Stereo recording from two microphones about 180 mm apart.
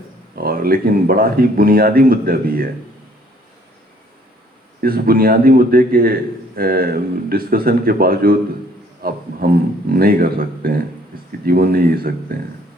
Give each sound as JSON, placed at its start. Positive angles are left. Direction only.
{"t": 0.3, "sound": "speech", "side_deg": -55}
{"t": 4.8, "sound": "speech", "side_deg": -55}
{"t": 9.0, "sound": "a sound", "side_deg": -55}
{"t": 9.4, "sound": "speech", "side_deg": -55}